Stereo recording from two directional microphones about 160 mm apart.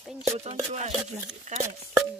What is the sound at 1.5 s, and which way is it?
Speech, 50° right (ahead or behind).